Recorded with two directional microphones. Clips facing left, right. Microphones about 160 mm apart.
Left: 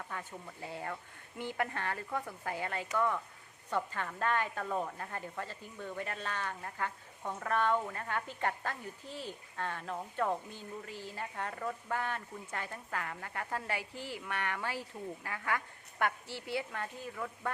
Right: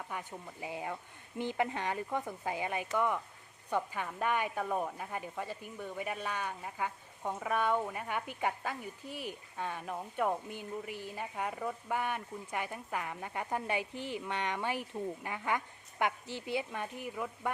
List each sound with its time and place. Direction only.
0.1 s speech: 15° right (ahead or behind)